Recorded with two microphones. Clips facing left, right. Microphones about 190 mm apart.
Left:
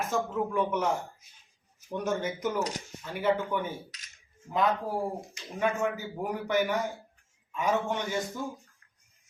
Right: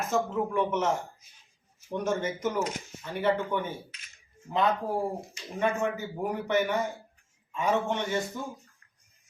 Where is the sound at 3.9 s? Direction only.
40° left (ahead or behind).